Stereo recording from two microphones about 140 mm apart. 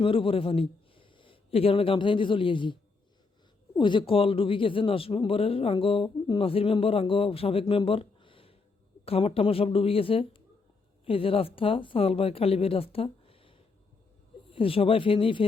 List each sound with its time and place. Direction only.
0.0 s a man's voice: 40° left (ahead or behind)
3.8 s speech: 35° left (ahead or behind)
7.6 s a sound: 40° left (ahead or behind)
9.0 s a woman's voice: 45° left (ahead or behind)